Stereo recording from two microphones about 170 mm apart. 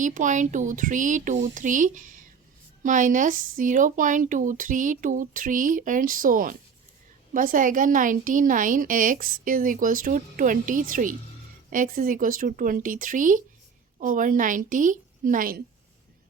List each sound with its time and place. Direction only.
0.0 s a woman's voice: 50° right (ahead or behind)